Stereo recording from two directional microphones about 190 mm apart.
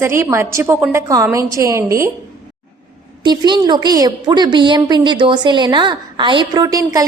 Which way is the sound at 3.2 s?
25° right (ahead or behind).